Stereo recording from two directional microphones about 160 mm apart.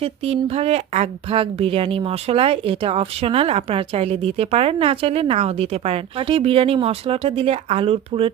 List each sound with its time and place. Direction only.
0.0 s a woman's voice: 40° right (ahead or behind)